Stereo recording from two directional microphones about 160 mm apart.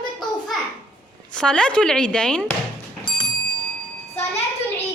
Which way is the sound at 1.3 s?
5° left (ahead or behind).